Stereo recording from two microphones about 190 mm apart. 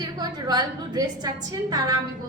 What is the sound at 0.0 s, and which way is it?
A woman's voice, 20° right (ahead or behind).